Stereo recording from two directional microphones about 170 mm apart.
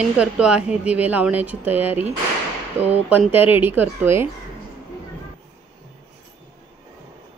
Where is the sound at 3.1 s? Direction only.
10° right (ahead or behind).